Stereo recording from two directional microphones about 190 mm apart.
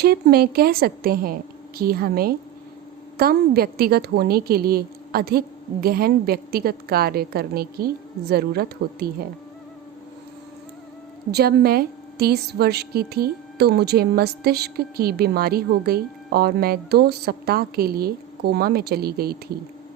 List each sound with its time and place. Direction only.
0.0 s a woman's voice: 55° right (ahead or behind)
11.3 s a woman's voice: 55° right (ahead or behind)